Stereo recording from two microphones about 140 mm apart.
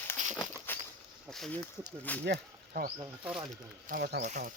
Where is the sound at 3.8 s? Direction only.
65° right (ahead or behind).